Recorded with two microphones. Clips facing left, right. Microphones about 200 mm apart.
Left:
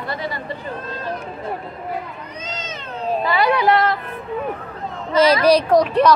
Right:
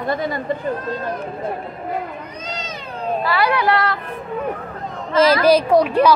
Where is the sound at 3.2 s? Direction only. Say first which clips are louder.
Left 2 dB; 20° left (ahead or behind).